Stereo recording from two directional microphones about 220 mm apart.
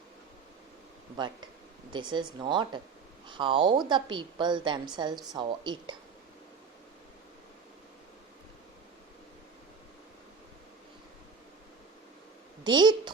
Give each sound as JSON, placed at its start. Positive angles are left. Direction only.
{"t": 1.1, "sound": "a woman's voice", "side_deg": -20}
{"t": 12.6, "sound": "a woman's voice", "side_deg": -20}